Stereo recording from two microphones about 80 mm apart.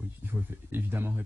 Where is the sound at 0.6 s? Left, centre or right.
Right.